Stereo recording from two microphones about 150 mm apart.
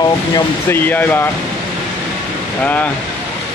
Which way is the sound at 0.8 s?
15° left (ahead or behind).